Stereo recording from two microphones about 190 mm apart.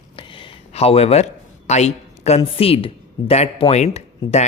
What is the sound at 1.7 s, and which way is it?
A woman's voice, 35° left (ahead or behind).